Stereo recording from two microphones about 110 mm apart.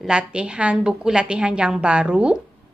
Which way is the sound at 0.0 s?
10° right (ahead or behind).